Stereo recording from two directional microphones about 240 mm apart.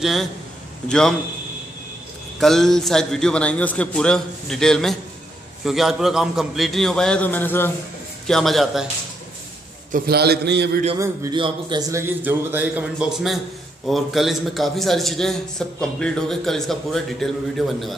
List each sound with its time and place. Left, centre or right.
0.0 s a man's voice: centre
2.4 s a man's voice: centre
9.9 s a man's voice: right
11.0 s a man's voice: centre